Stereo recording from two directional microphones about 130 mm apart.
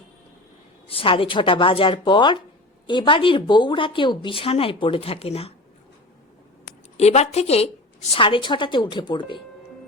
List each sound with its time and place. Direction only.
0.9 s a woman's voice: 45° left (ahead or behind)
6.9 s a woman's voice: 55° left (ahead or behind)
8.1 s a woman's voice: 40° left (ahead or behind)